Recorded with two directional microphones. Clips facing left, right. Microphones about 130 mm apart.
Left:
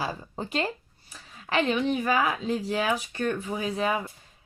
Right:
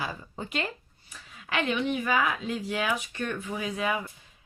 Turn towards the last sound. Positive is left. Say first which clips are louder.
# left 3 dB
turn(degrees=30)  # may be behind; listen again after turning